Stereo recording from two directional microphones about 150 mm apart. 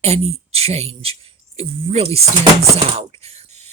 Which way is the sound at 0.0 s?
45° right (ahead or behind).